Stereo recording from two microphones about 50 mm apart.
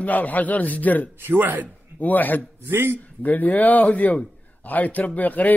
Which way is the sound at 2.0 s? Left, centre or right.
Left.